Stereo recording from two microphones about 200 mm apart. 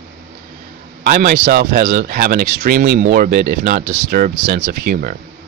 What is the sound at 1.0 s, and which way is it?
Speech, 45° right (ahead or behind).